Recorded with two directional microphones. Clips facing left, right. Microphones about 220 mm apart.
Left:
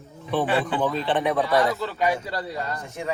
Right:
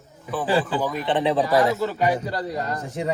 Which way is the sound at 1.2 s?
30° right (ahead or behind).